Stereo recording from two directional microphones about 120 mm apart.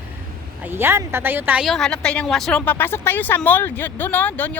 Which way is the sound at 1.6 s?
Centre (ahead or behind).